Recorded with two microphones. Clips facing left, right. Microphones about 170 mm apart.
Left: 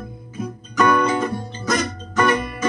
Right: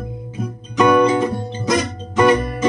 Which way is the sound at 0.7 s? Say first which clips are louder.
Right 5 dB; 15° right (ahead or behind).